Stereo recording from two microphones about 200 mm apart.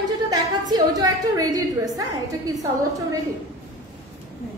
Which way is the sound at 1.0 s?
20° right (ahead or behind).